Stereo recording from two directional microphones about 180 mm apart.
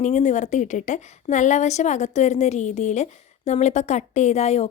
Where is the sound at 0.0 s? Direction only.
40° left (ahead or behind).